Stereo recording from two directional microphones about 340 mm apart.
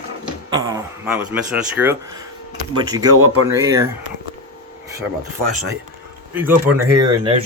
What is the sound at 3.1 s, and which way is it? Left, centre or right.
Speech, right.